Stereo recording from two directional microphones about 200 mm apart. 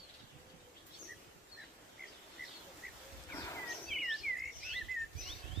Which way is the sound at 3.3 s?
15° left (ahead or behind).